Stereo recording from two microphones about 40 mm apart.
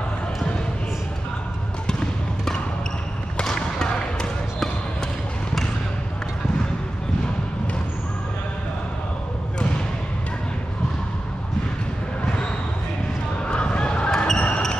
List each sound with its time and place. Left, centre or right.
3.5 s basketball bounce: centre
13.4 s a sound: left
14.1 s basketball bounce: centre